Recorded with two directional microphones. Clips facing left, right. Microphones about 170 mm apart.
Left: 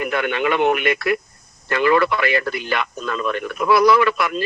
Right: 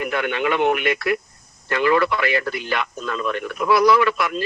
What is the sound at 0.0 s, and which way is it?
A man's voice, 65° left (ahead or behind).